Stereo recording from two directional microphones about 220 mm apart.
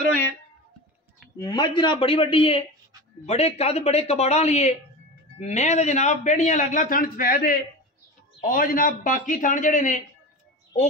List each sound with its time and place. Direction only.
1.4 s a man's voice: 20° left (ahead or behind)